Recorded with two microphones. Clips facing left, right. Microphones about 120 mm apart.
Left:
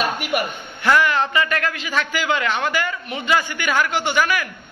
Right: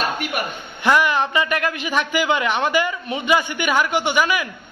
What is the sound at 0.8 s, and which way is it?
A man's voice, 15° right (ahead or behind).